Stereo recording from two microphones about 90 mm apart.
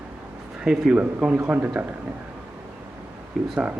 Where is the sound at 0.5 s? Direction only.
5° right (ahead or behind).